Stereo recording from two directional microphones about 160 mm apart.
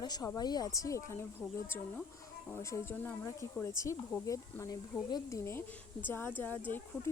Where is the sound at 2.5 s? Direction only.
15° left (ahead or behind).